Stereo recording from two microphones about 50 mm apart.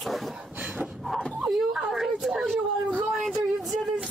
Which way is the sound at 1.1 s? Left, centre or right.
Centre.